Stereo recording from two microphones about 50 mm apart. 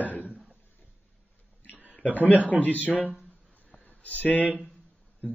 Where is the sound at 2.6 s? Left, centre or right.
Left.